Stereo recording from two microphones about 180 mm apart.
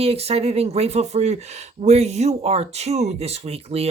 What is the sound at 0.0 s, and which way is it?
Speech, 35° right (ahead or behind).